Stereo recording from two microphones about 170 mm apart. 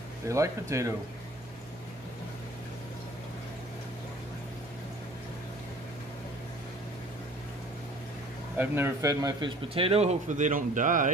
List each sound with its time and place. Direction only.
0.3 s speech: 15° right (ahead or behind)
8.5 s a man's voice: 10° right (ahead or behind); by 11.1 s 50° right (ahead or behind)